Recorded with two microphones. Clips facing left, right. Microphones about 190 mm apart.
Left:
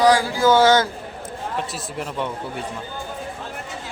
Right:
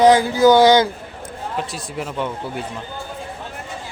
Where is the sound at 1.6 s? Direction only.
Centre (ahead or behind).